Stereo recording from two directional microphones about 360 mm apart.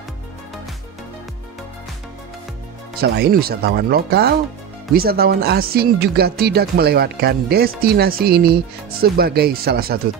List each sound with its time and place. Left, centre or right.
3.0 s speech: right